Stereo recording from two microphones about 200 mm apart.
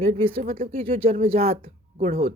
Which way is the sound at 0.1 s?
30° right (ahead or behind).